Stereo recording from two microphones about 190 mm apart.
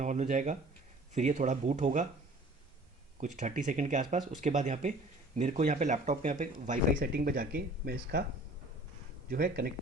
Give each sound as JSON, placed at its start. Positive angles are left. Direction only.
{"t": 0.0, "sound": "speech", "side_deg": -40}
{"t": 3.2, "sound": "speech", "side_deg": -40}
{"t": 9.3, "sound": "speech", "side_deg": -55}